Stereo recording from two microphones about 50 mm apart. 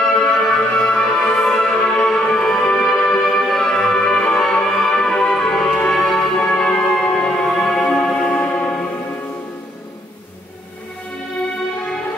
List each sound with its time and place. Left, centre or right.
0.1 s music: centre
6.9 s music: centre
8.5 s music: left